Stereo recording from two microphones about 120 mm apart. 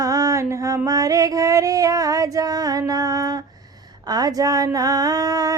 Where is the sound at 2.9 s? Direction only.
30° right (ahead or behind).